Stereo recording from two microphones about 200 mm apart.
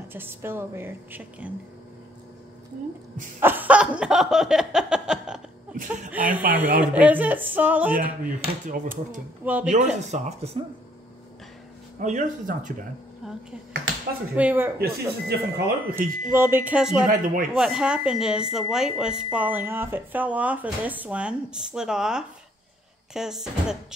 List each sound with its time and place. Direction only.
0.1 s a woman's voice: 10° right (ahead or behind)
3.3 s a woman's voice: 10° right (ahead or behind)
7.9 s speech: 40° right (ahead or behind)
9.4 s speech: 10° right (ahead or behind)
9.7 s speech: 35° right (ahead or behind)
12.0 s speech: 35° right (ahead or behind)
13.2 s a woman's voice: centre (ahead or behind)
14.8 s speech: 50° right (ahead or behind)
16.0 s a woman's voice: 10° right (ahead or behind)
17.1 s speech: 45° right (ahead or behind)
17.6 s a woman's voice: 5° right (ahead or behind)